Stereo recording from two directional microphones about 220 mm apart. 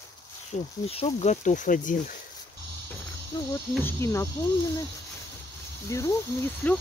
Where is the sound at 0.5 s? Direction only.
25° left (ahead or behind).